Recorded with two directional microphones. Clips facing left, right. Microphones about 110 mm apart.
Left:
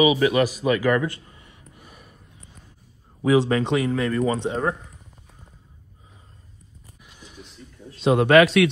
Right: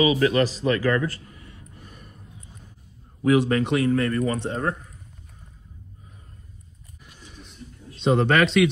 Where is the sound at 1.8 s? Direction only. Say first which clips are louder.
Even; 10° left (ahead or behind).